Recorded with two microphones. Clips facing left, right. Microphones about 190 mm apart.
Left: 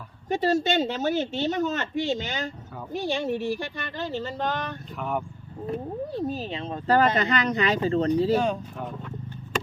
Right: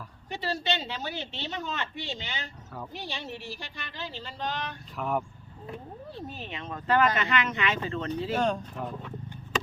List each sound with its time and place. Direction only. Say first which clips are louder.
0.3 s a woman's voice: left 8 dB; 45° left (ahead or behind)
4.9 s speech: even; centre (ahead or behind)
5.6 s speech: left 10 dB; 40° left (ahead or behind)
8.4 s speech: left 2 dB; 5° left (ahead or behind)